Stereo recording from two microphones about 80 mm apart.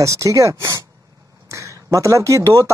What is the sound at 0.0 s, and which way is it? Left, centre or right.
Speech, right.